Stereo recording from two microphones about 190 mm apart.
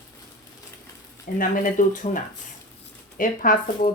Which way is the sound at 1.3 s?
45° left (ahead or behind).